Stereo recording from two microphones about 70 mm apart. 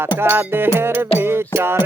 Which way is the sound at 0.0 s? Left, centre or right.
Right.